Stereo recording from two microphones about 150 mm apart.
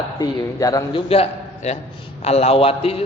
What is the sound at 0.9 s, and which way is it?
A man's voice, 40° left (ahead or behind).